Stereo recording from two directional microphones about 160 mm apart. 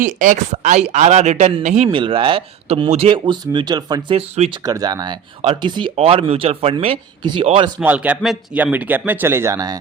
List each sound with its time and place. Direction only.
0.0 s speech: 55° right (ahead or behind); by 4.6 s 35° right (ahead or behind)
4.6 s speech: 25° right (ahead or behind)
7.8 s speech: 10° right (ahead or behind)